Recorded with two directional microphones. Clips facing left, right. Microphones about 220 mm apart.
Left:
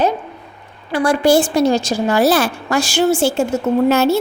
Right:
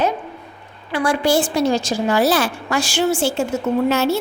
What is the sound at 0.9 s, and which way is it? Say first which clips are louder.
A woman's voice: left 4 dB; 45° left (ahead or behind).